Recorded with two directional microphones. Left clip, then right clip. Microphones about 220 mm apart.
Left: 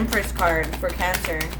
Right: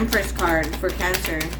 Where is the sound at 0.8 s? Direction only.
25° left (ahead or behind).